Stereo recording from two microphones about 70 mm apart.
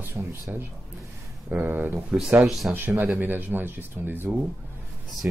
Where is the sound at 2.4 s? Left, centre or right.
Centre.